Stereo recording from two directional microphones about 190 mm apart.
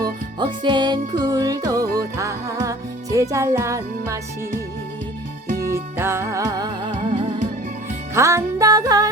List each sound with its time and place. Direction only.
0.3 s music: 25° right (ahead or behind)
5.6 s music: 15° right (ahead or behind)
6.9 s music: 35° right (ahead or behind)
8.1 s music: 15° right (ahead or behind)